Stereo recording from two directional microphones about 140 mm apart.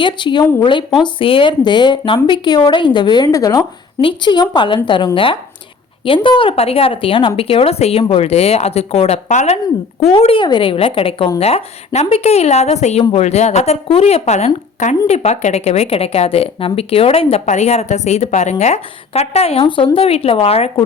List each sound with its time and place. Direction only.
0.0 s a woman's voice: 35° left (ahead or behind)